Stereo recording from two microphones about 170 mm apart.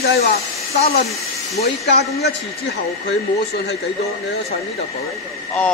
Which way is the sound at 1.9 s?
75° left (ahead or behind).